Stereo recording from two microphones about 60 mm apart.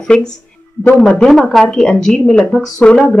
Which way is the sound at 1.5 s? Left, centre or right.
Centre.